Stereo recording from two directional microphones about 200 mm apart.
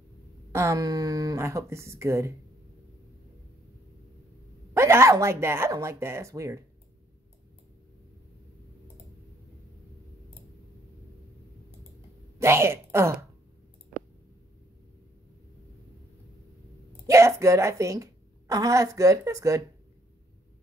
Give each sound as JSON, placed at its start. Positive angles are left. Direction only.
{"t": 0.5, "sound": "a woman's voice", "side_deg": -15}
{"t": 4.7, "sound": "a woman's voice", "side_deg": -15}
{"t": 12.4, "sound": "a woman's voice", "side_deg": -15}
{"t": 17.1, "sound": "a woman's voice", "side_deg": -15}